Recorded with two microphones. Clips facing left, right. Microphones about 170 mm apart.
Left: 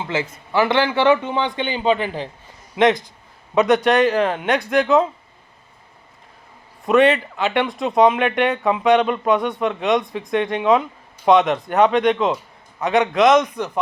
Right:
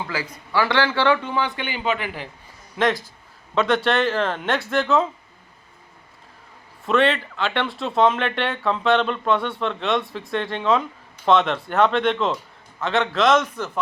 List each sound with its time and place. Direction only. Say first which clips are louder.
0.0 s speech: left 5 dB; 25° left (ahead or behind)
6.8 s speech: left 5 dB; 15° left (ahead or behind)